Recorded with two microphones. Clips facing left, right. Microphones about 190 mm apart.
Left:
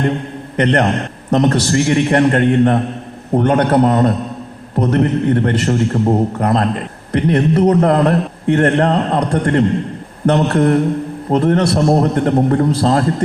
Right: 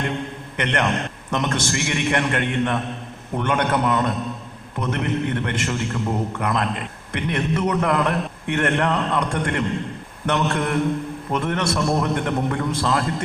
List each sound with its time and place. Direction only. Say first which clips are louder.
0.5 s a man's voice: left 8 dB; 35° left (ahead or behind)